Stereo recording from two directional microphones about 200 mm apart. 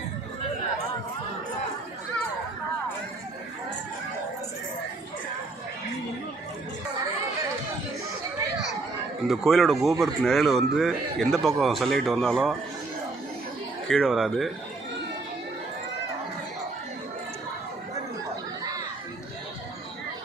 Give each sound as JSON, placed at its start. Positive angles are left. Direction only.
{"t": 9.2, "sound": "a man's voice", "side_deg": 0}
{"t": 13.8, "sound": "a man's voice", "side_deg": 0}